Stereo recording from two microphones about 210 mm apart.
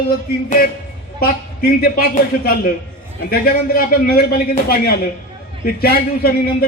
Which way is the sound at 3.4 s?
45° left (ahead or behind).